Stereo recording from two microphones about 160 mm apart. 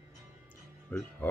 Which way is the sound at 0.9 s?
10° left (ahead or behind).